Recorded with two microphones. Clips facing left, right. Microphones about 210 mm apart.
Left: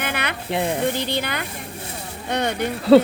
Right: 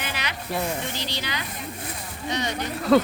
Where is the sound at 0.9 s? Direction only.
55° left (ahead or behind).